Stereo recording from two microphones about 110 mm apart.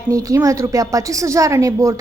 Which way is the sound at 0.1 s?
30° right (ahead or behind).